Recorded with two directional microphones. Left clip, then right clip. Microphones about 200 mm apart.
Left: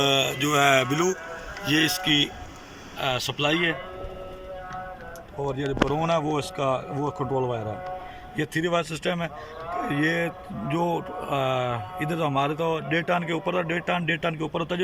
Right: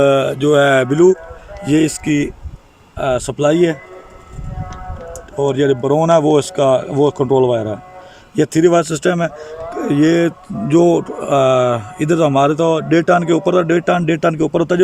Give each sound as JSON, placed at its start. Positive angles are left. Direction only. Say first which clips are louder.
{"t": 0.0, "sound": "a man's voice", "louder": "right 10 dB", "side_deg": -60}
{"t": 5.4, "sound": "speech", "louder": "right 12 dB", "side_deg": -55}